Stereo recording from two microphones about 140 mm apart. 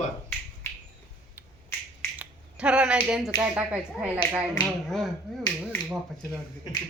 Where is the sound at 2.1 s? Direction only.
10° right (ahead or behind).